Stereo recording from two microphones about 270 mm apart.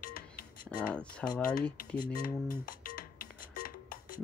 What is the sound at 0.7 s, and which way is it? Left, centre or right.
Speech, centre.